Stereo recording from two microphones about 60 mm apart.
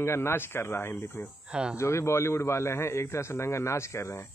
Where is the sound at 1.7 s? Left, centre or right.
Left.